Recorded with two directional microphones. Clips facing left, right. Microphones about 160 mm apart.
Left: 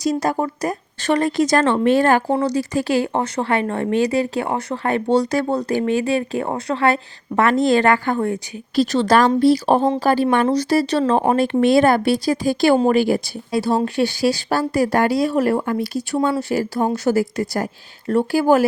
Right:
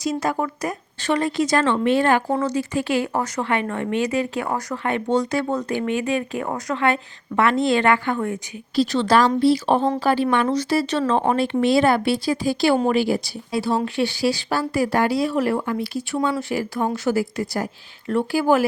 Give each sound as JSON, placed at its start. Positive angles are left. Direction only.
{"t": 0.0, "sound": "speech", "side_deg": 40}
{"t": 2.2, "sound": "speech", "side_deg": 30}